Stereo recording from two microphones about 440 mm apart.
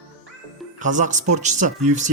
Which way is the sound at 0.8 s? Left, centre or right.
Centre.